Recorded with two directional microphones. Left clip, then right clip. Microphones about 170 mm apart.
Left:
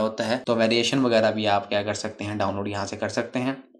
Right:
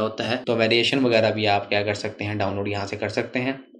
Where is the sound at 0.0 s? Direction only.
40° left (ahead or behind).